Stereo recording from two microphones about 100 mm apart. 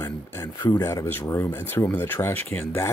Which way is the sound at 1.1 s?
20° left (ahead or behind).